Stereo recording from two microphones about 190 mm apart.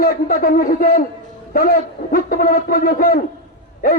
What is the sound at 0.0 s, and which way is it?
A man's voice, 50° left (ahead or behind).